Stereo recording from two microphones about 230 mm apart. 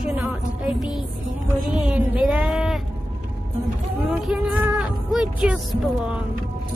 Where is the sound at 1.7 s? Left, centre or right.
Centre.